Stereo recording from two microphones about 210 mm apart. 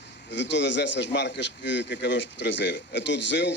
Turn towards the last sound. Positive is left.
turn(degrees=55)  # may be behind; listen again after turning